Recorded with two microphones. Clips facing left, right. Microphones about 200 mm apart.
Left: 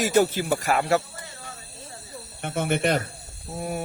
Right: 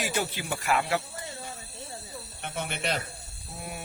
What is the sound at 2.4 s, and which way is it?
Speech, 50° left (ahead or behind).